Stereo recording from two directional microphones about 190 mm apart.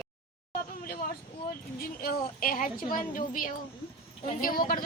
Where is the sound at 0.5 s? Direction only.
50° left (ahead or behind).